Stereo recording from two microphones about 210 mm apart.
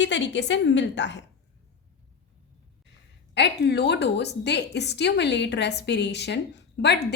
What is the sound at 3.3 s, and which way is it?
A woman's voice, 55° left (ahead or behind).